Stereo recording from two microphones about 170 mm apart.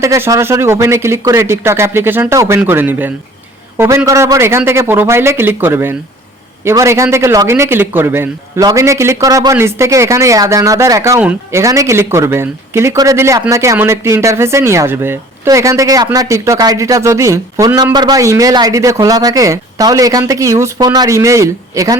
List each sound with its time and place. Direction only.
0.0 s a man's voice: 20° right (ahead or behind)
11.2 s a man's voice: 10° right (ahead or behind)
11.6 s a man's voice: 20° right (ahead or behind)